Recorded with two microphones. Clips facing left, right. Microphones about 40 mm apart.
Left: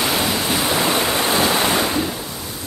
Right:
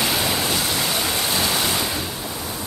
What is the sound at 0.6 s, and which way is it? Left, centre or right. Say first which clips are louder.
Waves: left 4 dB; left.